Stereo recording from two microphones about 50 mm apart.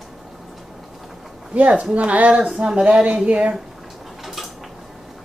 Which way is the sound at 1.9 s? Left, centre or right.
Right.